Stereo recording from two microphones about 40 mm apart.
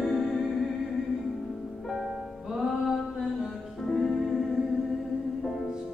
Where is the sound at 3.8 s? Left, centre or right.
Centre.